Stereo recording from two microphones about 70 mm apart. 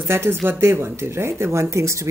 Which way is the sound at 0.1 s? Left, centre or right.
Right.